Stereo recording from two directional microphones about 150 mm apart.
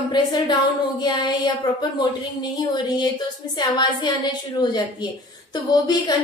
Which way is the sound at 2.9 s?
30° left (ahead or behind).